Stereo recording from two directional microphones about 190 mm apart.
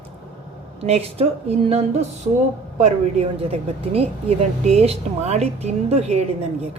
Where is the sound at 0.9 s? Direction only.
35° right (ahead or behind).